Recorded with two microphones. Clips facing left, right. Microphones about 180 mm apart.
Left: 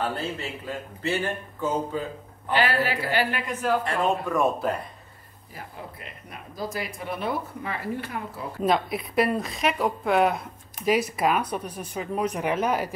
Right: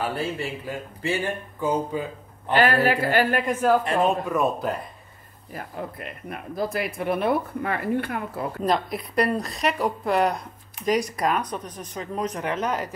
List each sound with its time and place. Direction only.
1.0 s a man's voice: 15° right (ahead or behind)
2.5 s a woman's voice: 50° right (ahead or behind)
3.8 s a man's voice: 20° right (ahead or behind)
4.3 s speech: centre (ahead or behind)
5.5 s speech: 55° right (ahead or behind)
8.6 s speech: centre (ahead or behind)